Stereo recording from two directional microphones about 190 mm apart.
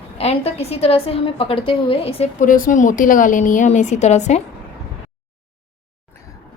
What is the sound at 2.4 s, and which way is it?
A woman's voice, 45° left (ahead or behind).